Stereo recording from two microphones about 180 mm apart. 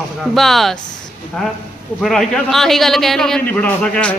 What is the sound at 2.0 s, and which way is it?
A man's voice, centre (ahead or behind).